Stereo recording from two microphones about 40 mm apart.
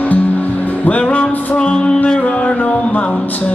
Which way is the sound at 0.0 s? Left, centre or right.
Left.